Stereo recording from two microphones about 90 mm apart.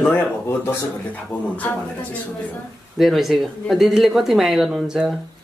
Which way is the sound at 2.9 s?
Centre (ahead or behind).